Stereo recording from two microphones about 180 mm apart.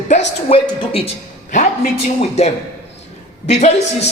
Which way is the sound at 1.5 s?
45° left (ahead or behind).